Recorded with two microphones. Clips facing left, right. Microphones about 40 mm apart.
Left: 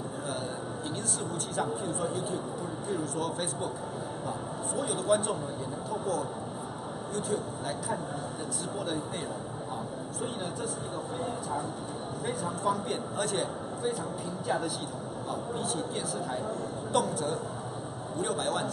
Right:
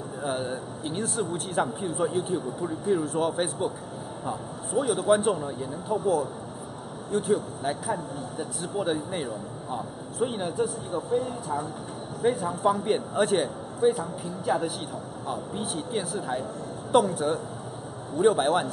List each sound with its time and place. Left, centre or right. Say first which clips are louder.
0.2 s a man's voice: right 8 dB; right
4.7 s a man's voice: right 6 dB; centre
8.7 s speech: right 8 dB; right
12.4 s speech: right 5 dB; centre
12.8 s a man's voice: right 7 dB; right
13.9 s speech: right 2 dB; centre
15.2 s a man's voice: right 2 dB; right